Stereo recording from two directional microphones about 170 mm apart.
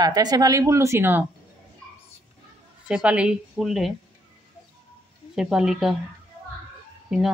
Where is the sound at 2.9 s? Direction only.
5° right (ahead or behind).